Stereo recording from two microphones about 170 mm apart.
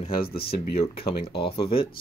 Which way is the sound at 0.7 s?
35° left (ahead or behind).